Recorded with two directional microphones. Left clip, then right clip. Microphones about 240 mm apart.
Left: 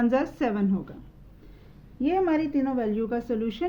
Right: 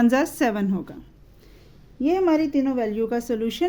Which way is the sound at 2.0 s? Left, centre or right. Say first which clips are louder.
Right 4 dB; right.